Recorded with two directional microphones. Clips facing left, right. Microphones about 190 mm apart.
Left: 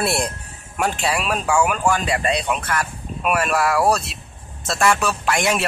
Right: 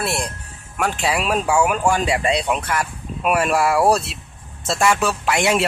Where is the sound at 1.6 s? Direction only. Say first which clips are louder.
Right 1 dB; 20° right (ahead or behind).